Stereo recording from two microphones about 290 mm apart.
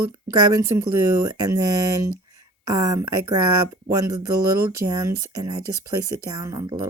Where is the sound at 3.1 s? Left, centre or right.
Right.